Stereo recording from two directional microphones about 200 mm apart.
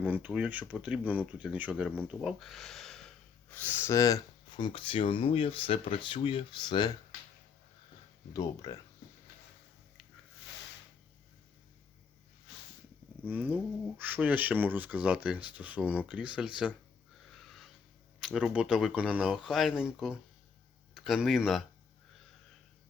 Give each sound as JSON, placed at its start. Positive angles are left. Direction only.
{"t": 0.0, "sound": "speech", "side_deg": -10}
{"t": 8.3, "sound": "speech", "side_deg": 20}
{"t": 13.2, "sound": "speech", "side_deg": -10}
{"t": 17.3, "sound": "wheeze", "side_deg": 0}
{"t": 18.3, "sound": "speech", "side_deg": -5}